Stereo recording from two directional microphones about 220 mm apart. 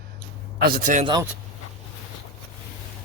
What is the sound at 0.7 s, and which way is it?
Speech, 35° right (ahead or behind).